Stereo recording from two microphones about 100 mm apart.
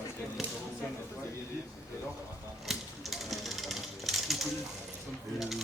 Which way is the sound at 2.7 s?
Centre (ahead or behind).